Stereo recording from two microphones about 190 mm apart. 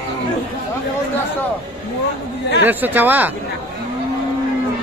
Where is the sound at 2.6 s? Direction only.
10° right (ahead or behind).